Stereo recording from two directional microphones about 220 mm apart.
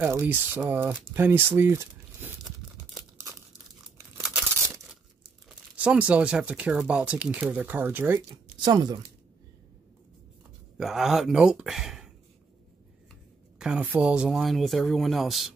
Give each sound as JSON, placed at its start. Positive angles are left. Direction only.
{"t": 0.0, "sound": "speech", "side_deg": -10}
{"t": 4.2, "sound": "tearing", "side_deg": -15}
{"t": 5.5, "sound": "speech", "side_deg": -5}
{"t": 8.6, "sound": "speech", "side_deg": -20}
{"t": 10.8, "sound": "speech", "side_deg": 0}
{"t": 13.6, "sound": "speech", "side_deg": -5}